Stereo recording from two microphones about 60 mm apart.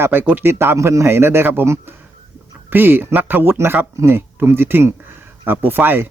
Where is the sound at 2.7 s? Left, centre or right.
Right.